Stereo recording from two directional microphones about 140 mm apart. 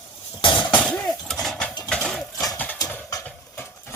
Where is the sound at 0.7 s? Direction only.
10° left (ahead or behind).